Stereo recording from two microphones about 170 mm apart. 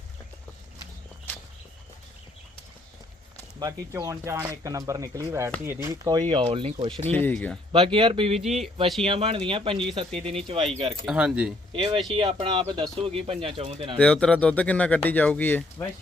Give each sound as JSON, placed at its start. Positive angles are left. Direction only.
{"t": 3.6, "sound": "speech", "side_deg": -20}
{"t": 7.0, "sound": "speech", "side_deg": 10}
{"t": 7.7, "sound": "speech", "side_deg": -30}
{"t": 11.0, "sound": "speech", "side_deg": -5}
{"t": 12.1, "sound": "speech", "side_deg": -30}
{"t": 14.0, "sound": "speech", "side_deg": 5}